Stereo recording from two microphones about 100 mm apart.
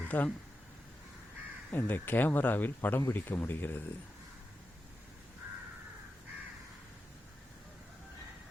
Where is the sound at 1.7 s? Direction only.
20° left (ahead or behind).